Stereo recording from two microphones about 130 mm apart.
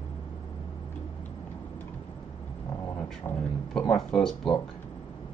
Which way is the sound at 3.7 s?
5° left (ahead or behind).